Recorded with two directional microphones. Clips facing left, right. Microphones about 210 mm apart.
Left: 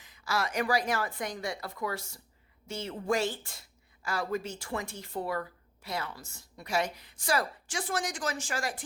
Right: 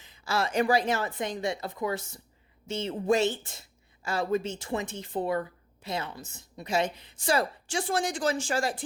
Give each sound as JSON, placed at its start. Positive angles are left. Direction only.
{"t": 0.0, "sound": "a woman's voice", "side_deg": -25}